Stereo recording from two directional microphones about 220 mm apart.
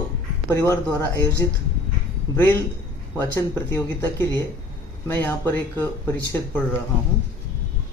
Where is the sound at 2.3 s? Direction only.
10° left (ahead or behind).